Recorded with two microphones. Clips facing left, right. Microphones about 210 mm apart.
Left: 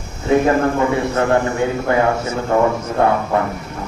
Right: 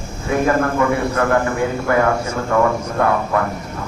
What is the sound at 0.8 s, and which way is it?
A man's voice, 25° left (ahead or behind).